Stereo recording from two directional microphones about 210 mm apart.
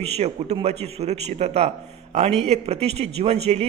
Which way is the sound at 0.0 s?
30° right (ahead or behind).